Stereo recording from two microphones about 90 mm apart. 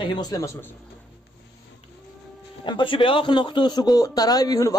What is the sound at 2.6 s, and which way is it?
Speech, 65° left (ahead or behind).